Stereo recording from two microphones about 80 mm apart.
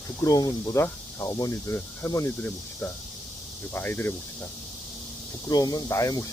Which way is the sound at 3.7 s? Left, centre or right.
Left.